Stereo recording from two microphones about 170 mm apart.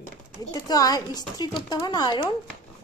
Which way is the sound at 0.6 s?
20° left (ahead or behind).